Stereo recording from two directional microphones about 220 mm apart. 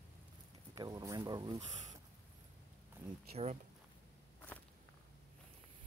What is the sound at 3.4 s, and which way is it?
Speech, 30° right (ahead or behind).